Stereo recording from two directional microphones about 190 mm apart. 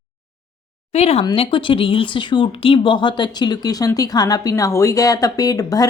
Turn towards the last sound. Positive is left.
turn(degrees=20)  # may be behind; listen again after turning